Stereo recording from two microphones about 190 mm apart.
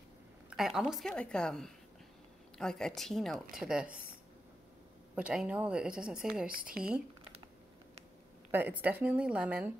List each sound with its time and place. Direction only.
0.5 s a woman's voice: centre (ahead or behind)
5.1 s a woman's voice: 5° right (ahead or behind)
8.5 s a woman's voice: 10° right (ahead or behind)